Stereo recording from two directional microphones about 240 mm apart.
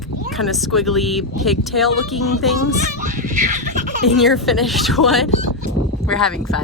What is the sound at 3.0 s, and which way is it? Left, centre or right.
Baby laughter, right.